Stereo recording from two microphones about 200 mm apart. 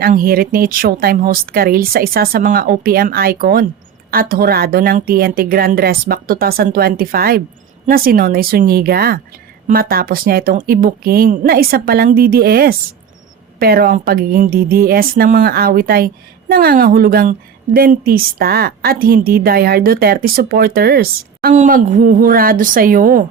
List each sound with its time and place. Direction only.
0.0 s a woman's voice: 45° right (ahead or behind)